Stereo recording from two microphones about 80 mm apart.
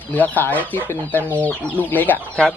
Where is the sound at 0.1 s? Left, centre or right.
Left.